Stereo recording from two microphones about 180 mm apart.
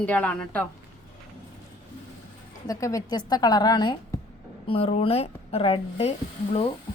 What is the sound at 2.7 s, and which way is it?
A woman's voice, 20° left (ahead or behind).